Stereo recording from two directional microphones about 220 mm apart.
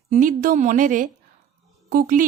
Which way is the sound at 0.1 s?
35° right (ahead or behind).